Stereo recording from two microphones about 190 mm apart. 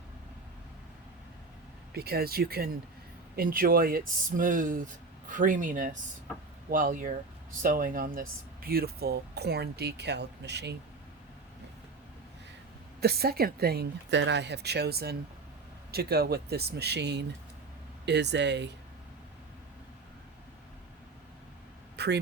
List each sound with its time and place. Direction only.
1.9 s speech: 55° right (ahead or behind)
13.0 s speech: 55° right (ahead or behind)
21.9 s a sound: 60° right (ahead or behind)